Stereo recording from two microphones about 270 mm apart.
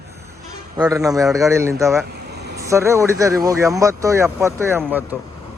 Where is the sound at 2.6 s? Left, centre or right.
Centre.